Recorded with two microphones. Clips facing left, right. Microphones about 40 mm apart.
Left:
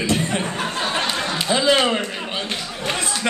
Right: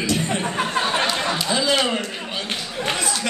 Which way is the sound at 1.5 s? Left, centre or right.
Left.